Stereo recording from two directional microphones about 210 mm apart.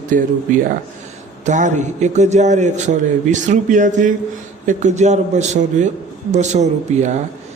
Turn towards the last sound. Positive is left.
turn(degrees=-35)  # may be behind; listen again after turning